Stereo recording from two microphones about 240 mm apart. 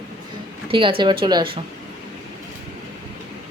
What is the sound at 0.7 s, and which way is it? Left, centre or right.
Speech, right.